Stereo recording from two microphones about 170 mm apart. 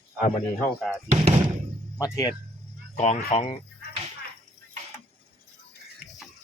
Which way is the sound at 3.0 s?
45° left (ahead or behind).